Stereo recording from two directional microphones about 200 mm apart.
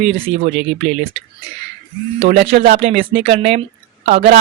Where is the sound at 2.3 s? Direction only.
55° right (ahead or behind).